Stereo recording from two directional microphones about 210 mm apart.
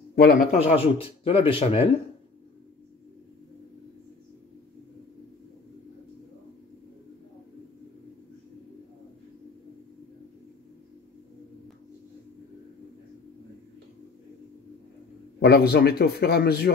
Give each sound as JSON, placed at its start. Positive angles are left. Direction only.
{"t": 0.1, "sound": "speech", "side_deg": 45}
{"t": 15.4, "sound": "speech", "side_deg": 50}